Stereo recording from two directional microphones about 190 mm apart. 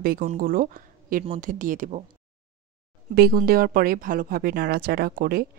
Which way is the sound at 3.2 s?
55° right (ahead or behind).